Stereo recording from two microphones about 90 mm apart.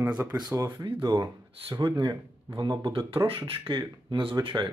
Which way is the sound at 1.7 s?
65° right (ahead or behind).